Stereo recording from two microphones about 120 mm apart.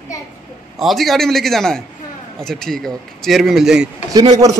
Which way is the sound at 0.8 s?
Centre (ahead or behind).